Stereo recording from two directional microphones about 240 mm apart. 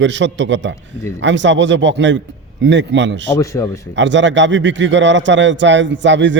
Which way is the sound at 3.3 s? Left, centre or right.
Centre.